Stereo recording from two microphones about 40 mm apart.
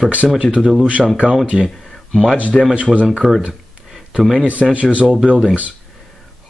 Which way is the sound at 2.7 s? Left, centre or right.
Right.